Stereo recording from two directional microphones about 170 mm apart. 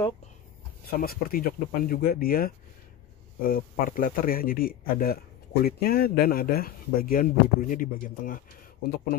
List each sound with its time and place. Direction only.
1.0 s speech: 60° left (ahead or behind)